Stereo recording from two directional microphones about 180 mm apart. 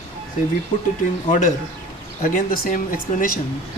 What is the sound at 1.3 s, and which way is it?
A man's voice, 45° left (ahead or behind).